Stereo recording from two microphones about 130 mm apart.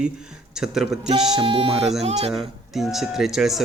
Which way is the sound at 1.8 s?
5° right (ahead or behind).